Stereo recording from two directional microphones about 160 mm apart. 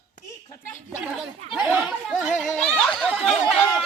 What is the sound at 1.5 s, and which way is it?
Speech, 5° right (ahead or behind).